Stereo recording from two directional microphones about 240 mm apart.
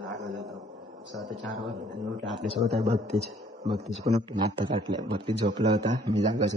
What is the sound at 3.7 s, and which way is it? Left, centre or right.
A man's voice, right.